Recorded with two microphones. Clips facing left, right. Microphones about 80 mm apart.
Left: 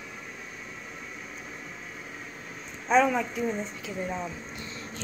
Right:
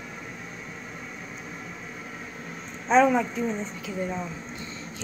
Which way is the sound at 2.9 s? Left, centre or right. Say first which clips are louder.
Right 3 dB; centre.